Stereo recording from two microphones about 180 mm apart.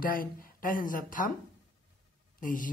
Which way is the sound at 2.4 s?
50° left (ahead or behind).